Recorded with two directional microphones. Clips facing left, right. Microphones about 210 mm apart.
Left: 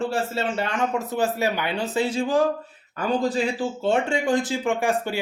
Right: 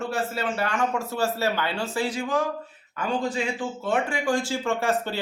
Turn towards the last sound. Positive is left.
turn(degrees=15)  # may be behind; listen again after turning